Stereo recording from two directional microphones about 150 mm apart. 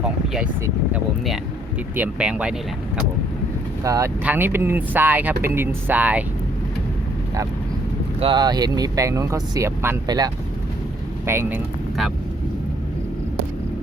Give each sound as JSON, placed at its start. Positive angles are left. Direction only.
{"t": 2.0, "sound": "speech", "side_deg": -10}
{"t": 3.8, "sound": "speech", "side_deg": -20}
{"t": 8.2, "sound": "speech", "side_deg": -30}
{"t": 11.3, "sound": "speech", "side_deg": -15}